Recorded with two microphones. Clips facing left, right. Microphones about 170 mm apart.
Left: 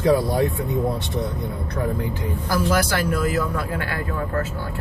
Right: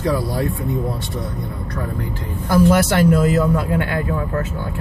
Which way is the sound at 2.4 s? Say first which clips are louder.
Right 7 dB; 25° right (ahead or behind).